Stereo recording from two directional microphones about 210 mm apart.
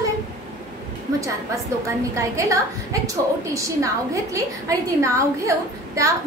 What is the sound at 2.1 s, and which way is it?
A woman's voice, 15° right (ahead or behind).